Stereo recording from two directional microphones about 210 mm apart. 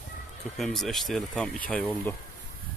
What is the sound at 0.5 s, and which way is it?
Speech, centre (ahead or behind).